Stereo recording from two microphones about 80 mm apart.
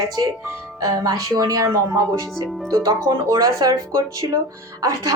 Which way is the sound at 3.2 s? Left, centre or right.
Right.